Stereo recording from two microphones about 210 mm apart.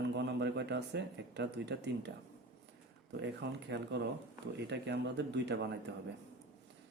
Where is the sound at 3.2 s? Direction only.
55° right (ahead or behind).